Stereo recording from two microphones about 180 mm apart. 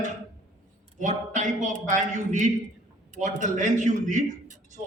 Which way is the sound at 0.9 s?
45° right (ahead or behind).